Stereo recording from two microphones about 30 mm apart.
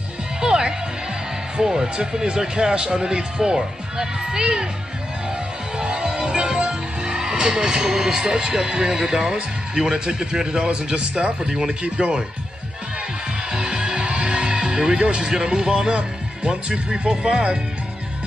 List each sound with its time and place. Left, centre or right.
0.4 s music: right
1.6 s speech: centre
5.8 s speech: right
11.0 s speech: right
11.4 s speech: right
11.8 s speech: right
13.5 s music: right
15.0 s speech: right
16.4 s speech: right